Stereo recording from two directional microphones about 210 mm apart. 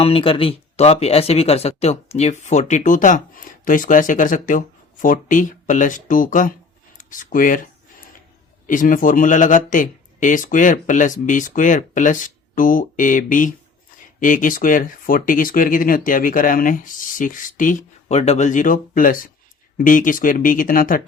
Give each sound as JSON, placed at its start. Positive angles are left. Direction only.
{"t": 0.0, "sound": "a man's voice", "side_deg": 25}
{"t": 6.9, "sound": "a sound", "side_deg": 40}
{"t": 8.6, "sound": "a man's voice", "side_deg": 40}